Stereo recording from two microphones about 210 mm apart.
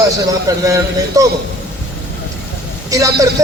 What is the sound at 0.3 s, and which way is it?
Speech, 15° right (ahead or behind).